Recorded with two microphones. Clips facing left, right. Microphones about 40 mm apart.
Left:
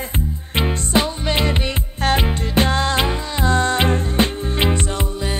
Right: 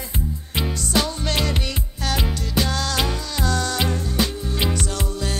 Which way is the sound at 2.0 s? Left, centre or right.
Left.